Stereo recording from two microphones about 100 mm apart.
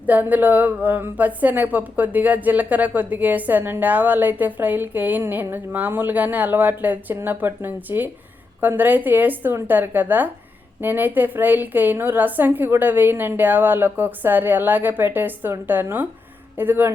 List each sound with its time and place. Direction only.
0.0 s a woman's voice: 15° right (ahead or behind)